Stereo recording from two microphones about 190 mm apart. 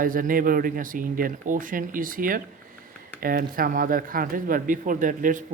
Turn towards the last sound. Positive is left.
turn(degrees=-45)  # may be behind; listen again after turning